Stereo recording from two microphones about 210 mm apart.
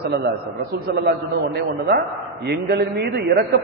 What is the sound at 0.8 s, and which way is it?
A man's voice, 50° right (ahead or behind).